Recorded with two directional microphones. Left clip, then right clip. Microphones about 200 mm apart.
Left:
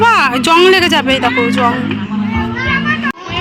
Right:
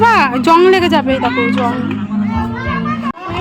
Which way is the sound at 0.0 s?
10° right (ahead or behind).